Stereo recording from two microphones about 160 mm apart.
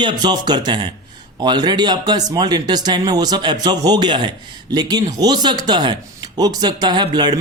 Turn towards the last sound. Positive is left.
turn(degrees=-25)  # may be behind; listen again after turning